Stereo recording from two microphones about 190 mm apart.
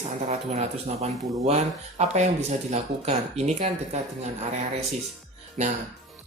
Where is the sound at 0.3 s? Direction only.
35° right (ahead or behind).